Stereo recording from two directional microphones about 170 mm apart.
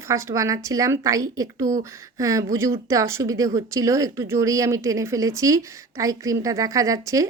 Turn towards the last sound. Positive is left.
turn(degrees=-20)  # may be behind; listen again after turning